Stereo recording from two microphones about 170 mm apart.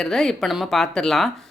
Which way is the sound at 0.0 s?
Centre (ahead or behind).